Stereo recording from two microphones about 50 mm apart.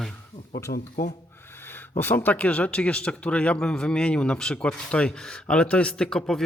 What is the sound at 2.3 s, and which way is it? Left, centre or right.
Speech, left.